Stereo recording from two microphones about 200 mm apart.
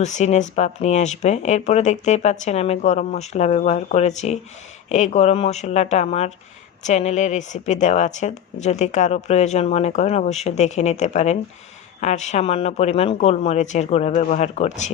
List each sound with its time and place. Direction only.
0.0 s speech: 35° left (ahead or behind)